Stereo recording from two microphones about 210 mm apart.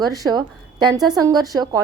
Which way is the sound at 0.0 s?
20° right (ahead or behind).